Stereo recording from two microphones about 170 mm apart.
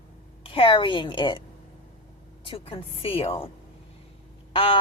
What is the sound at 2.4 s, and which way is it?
A woman's voice, 35° left (ahead or behind).